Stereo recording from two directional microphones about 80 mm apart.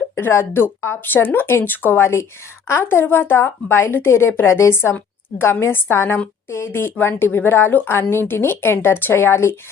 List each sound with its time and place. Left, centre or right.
0.2 s a woman's voice: left